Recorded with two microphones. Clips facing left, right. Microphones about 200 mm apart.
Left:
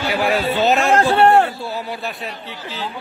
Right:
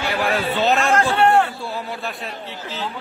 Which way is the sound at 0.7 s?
25° left (ahead or behind).